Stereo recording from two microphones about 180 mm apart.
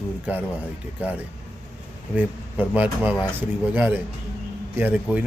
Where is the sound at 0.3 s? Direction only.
10° right (ahead or behind).